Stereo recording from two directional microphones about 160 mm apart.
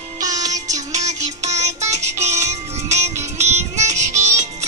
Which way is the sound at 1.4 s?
45° right (ahead or behind).